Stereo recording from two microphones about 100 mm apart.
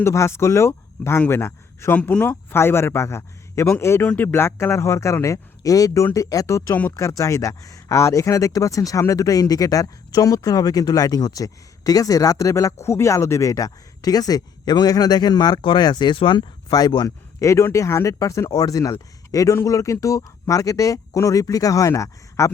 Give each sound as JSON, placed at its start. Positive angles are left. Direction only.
{"t": 0.0, "sound": "a man's voice", "side_deg": 25}
{"t": 16.6, "sound": "speech", "side_deg": 40}